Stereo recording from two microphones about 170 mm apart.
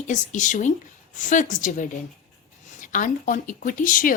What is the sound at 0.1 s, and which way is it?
A woman's voice, 45° left (ahead or behind).